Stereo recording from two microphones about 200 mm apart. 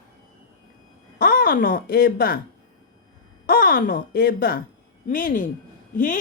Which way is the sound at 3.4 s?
50° left (ahead or behind).